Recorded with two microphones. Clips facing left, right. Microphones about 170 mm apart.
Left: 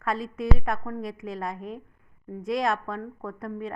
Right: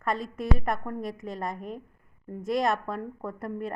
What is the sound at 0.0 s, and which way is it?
A woman's voice, centre (ahead or behind).